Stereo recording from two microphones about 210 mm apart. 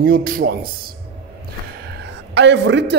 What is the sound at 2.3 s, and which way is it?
Speech, 55° right (ahead or behind).